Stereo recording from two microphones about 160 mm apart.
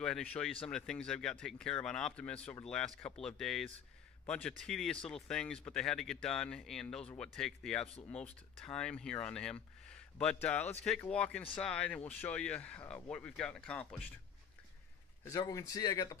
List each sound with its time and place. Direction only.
0.0 s speech: 5° left (ahead or behind)
15.2 s speech: 20° left (ahead or behind)